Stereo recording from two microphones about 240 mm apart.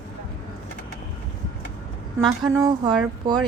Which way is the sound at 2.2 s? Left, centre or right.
Centre.